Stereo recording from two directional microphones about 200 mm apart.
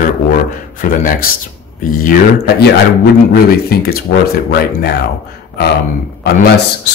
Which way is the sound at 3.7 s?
50° left (ahead or behind).